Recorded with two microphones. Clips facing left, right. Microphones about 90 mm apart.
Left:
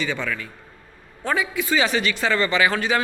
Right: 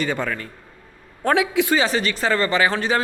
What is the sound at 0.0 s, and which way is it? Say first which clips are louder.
Speech: right 2 dB; 40° right (ahead or behind).